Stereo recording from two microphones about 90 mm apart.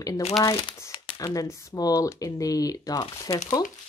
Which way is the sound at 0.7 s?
75° left (ahead or behind).